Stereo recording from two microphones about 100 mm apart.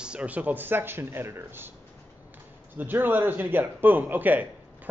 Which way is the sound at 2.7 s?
20° right (ahead or behind).